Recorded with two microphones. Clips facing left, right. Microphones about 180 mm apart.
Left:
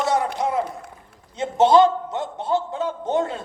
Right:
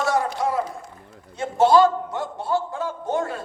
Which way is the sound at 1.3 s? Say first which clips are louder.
Left 1 dB; 20° left (ahead or behind).